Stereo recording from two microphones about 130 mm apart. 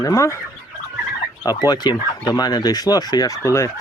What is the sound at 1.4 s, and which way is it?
Speech, 30° left (ahead or behind).